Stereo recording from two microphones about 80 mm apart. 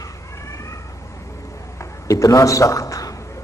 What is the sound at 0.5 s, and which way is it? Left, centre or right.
Cat, left.